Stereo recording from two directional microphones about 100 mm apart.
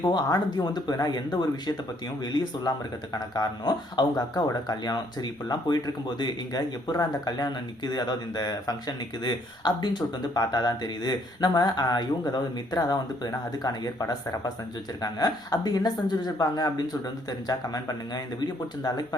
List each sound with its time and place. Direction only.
0.0 s speech: 45° left (ahead or behind)